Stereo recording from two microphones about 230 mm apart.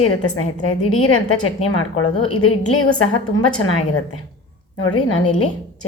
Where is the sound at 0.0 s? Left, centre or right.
Left.